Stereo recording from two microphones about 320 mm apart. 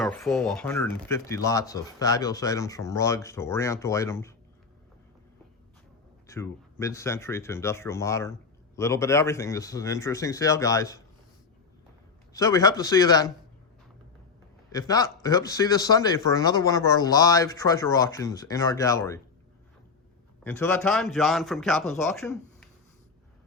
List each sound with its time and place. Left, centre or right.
0.0 s speech: centre
6.2 s speech: centre
12.3 s speech: centre
14.7 s speech: centre
20.4 s a man's voice: centre